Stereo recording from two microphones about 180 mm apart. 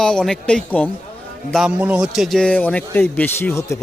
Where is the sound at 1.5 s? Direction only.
5° right (ahead or behind).